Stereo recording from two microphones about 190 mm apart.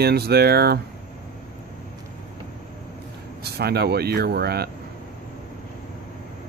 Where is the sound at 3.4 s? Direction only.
55° right (ahead or behind).